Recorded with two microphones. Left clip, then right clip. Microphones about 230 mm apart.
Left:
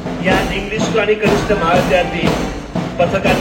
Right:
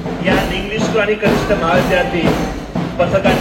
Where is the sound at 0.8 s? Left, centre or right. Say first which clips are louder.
Even; left.